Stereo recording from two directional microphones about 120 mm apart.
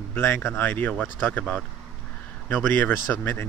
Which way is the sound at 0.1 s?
20° left (ahead or behind).